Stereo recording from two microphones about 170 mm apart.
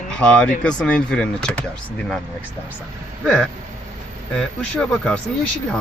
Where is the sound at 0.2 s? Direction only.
5° left (ahead or behind).